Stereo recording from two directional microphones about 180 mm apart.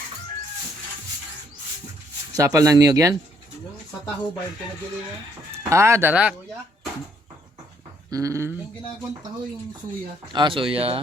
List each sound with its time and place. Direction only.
2.3 s speech: 20° right (ahead or behind)
5.6 s speech: 15° right (ahead or behind)
8.1 s speech: 15° right (ahead or behind)
10.3 s speech: 30° right (ahead or behind)